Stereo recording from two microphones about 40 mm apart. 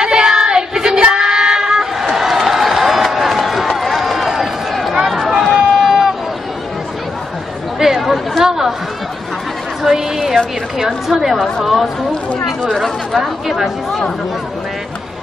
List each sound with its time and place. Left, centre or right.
0.0 s child singing: centre
1.0 s a sound: centre
4.9 s run: centre
5.4 s a sound: centre
7.8 s chatter: centre
9.8 s a sound: centre
11.1 s a woman's voice: centre
11.3 s a woman's voice: centre
12.8 s speech: centre